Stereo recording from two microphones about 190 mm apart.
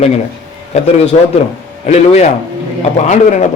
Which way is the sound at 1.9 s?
35° left (ahead or behind).